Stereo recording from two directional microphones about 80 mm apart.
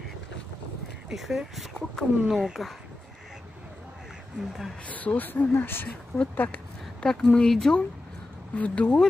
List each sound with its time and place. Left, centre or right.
1.1 s speech: centre
4.8 s speech: centre
7.0 s speech: centre